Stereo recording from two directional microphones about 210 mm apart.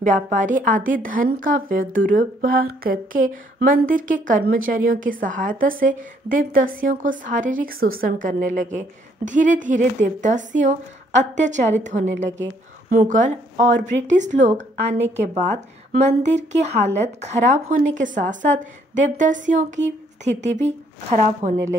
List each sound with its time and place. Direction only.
0.0 s a woman's voice: 35° right (ahead or behind)